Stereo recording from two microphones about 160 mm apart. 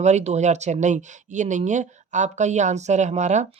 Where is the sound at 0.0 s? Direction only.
45° right (ahead or behind).